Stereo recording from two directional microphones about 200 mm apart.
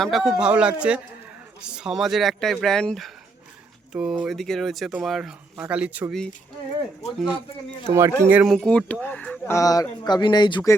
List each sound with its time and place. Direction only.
0.0 s speech: centre (ahead or behind)
7.0 s speech: 35° left (ahead or behind)
7.9 s speech: 15° right (ahead or behind); by 10.8 s 20° left (ahead or behind)